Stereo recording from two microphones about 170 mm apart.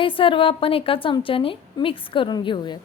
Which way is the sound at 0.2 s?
30° left (ahead or behind).